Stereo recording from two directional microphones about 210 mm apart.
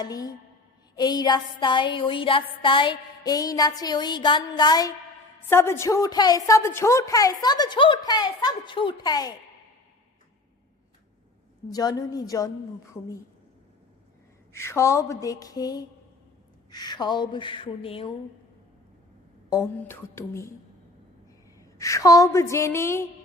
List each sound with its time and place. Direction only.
0.0 s a woman's voice: 20° left (ahead or behind)
0.9 s a sound: 20° left (ahead or behind)
5.5 s a woman's voice: 10° left (ahead or behind)
11.7 s a woman's voice: 20° left (ahead or behind)
14.5 s a woman's voice: 10° left (ahead or behind)
16.7 s a sound: 20° left (ahead or behind)
19.5 s a woman's voice: 15° left (ahead or behind)
21.8 s a woman's voice: 15° left (ahead or behind)